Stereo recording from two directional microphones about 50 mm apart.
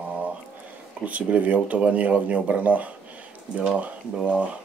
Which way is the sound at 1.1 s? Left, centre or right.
Right.